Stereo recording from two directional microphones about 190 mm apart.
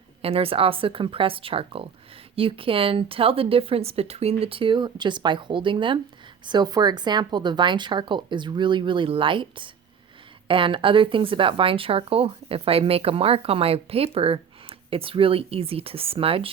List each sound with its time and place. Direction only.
0.2 s speech: 30° right (ahead or behind)